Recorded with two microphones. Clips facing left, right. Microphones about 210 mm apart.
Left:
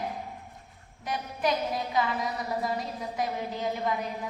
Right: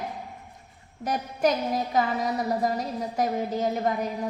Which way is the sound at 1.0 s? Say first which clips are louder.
Right 5 dB; 45° right (ahead or behind).